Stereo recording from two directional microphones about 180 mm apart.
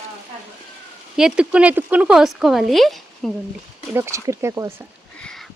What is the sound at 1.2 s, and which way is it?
Speech, 5° right (ahead or behind).